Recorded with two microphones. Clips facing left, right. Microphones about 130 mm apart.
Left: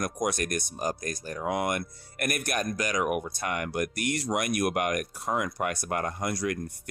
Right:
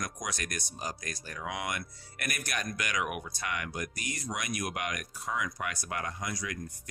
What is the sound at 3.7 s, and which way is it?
Speech, 65° left (ahead or behind).